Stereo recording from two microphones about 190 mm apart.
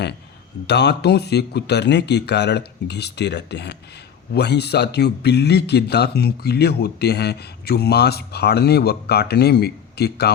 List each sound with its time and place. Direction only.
0.7 s speech: 60° left (ahead or behind)